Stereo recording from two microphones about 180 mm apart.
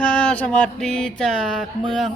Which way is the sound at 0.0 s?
5° left (ahead or behind).